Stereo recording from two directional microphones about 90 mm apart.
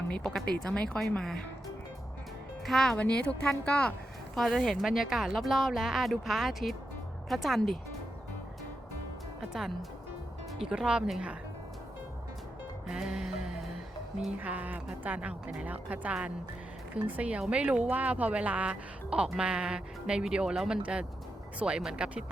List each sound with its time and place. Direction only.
0.1 s a woman's voice: 10° left (ahead or behind)
2.6 s speech: 5° left (ahead or behind)
4.4 s a woman's voice: centre (ahead or behind)
9.5 s a woman's voice: 5° right (ahead or behind)
12.9 s music: 5° right (ahead or behind)
14.4 s speech: 20° right (ahead or behind)